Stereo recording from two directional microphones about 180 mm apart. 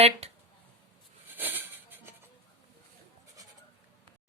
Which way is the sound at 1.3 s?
10° right (ahead or behind).